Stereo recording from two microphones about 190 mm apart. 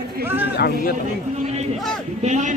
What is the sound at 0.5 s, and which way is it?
Speech, 55° left (ahead or behind).